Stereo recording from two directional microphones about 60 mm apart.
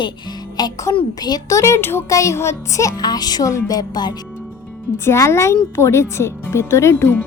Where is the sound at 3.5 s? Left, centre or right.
Left.